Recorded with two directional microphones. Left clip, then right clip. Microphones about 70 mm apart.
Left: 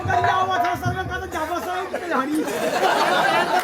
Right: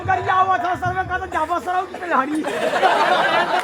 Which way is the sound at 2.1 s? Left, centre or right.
Right.